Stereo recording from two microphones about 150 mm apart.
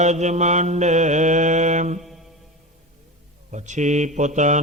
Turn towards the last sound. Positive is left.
turn(degrees=-55)  # may be behind; listen again after turning